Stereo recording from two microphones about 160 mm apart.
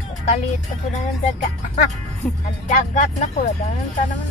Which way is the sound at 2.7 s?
50° left (ahead or behind).